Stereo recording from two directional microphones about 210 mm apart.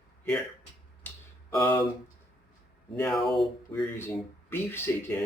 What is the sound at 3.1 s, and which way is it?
Speech, centre (ahead or behind).